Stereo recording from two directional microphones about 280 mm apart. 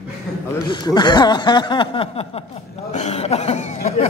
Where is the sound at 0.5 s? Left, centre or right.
Centre.